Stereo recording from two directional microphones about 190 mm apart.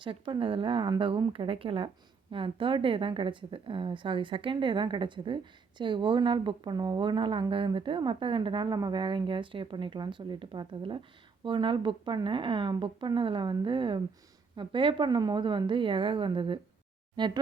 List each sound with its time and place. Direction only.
0.0 s a woman's voice: 25° right (ahead or behind)